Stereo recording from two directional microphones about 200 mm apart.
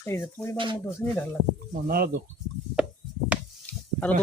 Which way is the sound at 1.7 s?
50° right (ahead or behind).